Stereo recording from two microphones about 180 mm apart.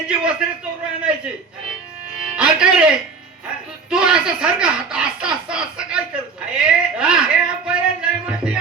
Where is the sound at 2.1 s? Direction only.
5° right (ahead or behind).